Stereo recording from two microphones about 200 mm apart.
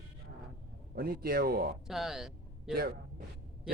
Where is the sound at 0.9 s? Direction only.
50° right (ahead or behind).